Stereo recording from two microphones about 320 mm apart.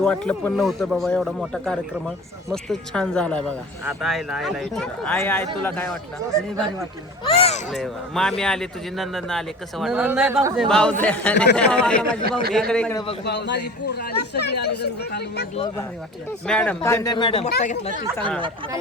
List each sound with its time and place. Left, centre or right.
0.0 s speech: centre
7.3 s a man's voice: centre
7.7 s a man's voice: centre
13.2 s speech: left
16.5 s a man's voice: centre; by 17.9 s left
18.3 s speech: centre